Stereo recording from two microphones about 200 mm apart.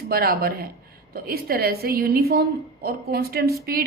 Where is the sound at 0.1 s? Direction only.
50° right (ahead or behind).